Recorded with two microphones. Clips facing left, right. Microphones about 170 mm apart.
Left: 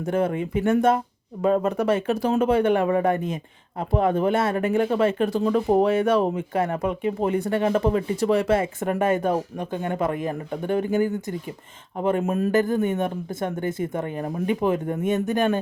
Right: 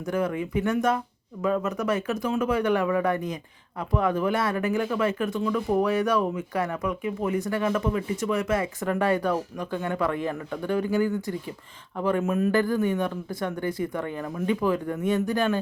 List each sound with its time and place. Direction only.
0.0 s speech: 25° left (ahead or behind)
12.5 s speech: 20° left (ahead or behind)